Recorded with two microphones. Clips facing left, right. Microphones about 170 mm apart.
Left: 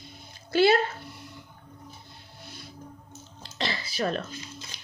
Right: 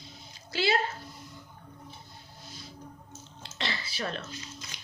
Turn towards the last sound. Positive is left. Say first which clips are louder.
# left 2 dB
turn(degrees=35)  # may be behind; listen again after turning